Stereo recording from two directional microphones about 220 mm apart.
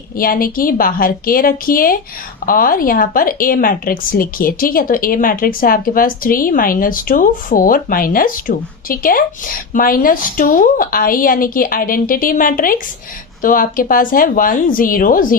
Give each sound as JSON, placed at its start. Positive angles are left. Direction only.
{"t": 0.2, "sound": "a woman's voice", "side_deg": 40}